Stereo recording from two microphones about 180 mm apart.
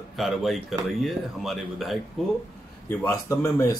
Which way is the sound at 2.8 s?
15° left (ahead or behind).